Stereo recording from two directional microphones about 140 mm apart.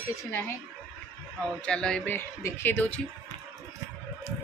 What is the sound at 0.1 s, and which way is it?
Speech, 20° left (ahead or behind).